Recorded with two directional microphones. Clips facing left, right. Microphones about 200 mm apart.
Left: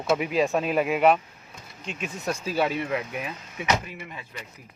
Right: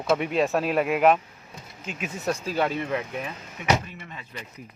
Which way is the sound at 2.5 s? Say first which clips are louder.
Left 2 dB; 10° left (ahead or behind).